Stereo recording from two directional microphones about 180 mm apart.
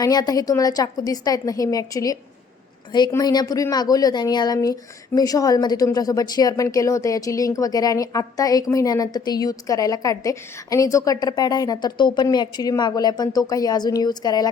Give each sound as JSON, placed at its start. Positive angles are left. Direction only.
{"t": 0.0, "sound": "a woman's voice", "side_deg": 20}